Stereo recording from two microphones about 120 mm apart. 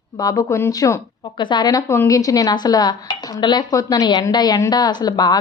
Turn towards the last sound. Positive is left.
turn(degrees=35)  # may be behind; listen again after turning